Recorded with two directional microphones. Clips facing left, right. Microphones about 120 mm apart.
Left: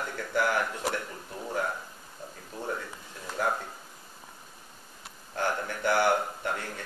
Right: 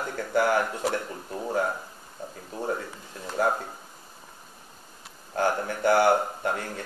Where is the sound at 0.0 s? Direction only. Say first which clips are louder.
Right 4 dB; 30° right (ahead or behind).